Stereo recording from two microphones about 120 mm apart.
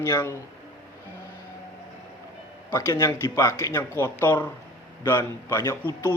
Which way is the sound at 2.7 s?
25° left (ahead or behind).